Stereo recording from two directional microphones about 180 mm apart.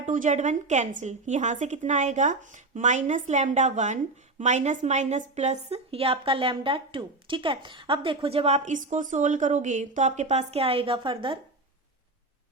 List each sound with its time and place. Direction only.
0.0 s a woman's voice: 45° right (ahead or behind); by 11.3 s 25° right (ahead or behind)